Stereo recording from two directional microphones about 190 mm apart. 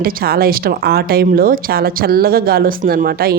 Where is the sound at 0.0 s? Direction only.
50° right (ahead or behind).